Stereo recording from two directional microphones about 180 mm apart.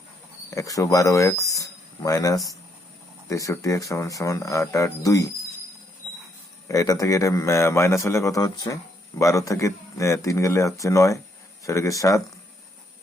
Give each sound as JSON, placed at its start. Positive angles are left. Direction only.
{"t": 0.5, "sound": "a man's voice", "side_deg": 20}
{"t": 6.7, "sound": "a man's voice", "side_deg": 20}